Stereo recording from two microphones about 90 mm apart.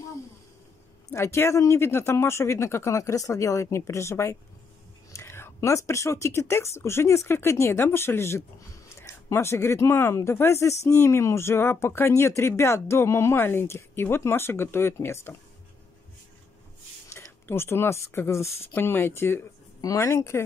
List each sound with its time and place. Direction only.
1.1 s speech: 30° left (ahead or behind)
17.1 s speech: 30° left (ahead or behind)
19.8 s speech: 35° left (ahead or behind)